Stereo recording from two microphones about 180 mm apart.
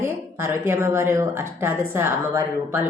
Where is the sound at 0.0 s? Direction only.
15° right (ahead or behind).